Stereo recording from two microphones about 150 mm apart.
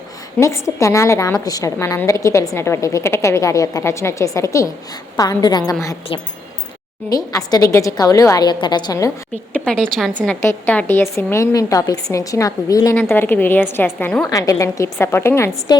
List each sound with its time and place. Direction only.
0.3 s a woman's voice: 20° left (ahead or behind)
7.1 s a woman's voice: 25° left (ahead or behind)
9.5 s a woman's voice: 5° left (ahead or behind)